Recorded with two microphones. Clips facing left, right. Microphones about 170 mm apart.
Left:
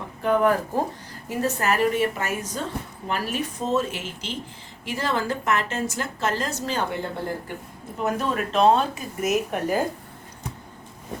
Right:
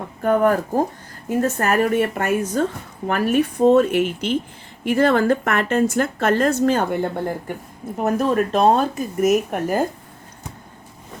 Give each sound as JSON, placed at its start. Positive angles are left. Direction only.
{"t": 0.2, "sound": "a woman's voice", "side_deg": -45}